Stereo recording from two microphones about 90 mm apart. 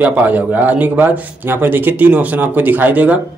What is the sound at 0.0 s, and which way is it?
Speech, 15° right (ahead or behind).